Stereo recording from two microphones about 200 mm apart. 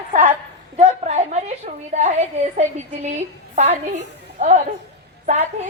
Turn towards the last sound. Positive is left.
turn(degrees=-35)  # may be behind; listen again after turning